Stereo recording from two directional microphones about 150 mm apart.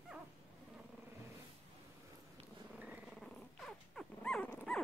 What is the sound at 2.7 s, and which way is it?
Purr, 5° right (ahead or behind).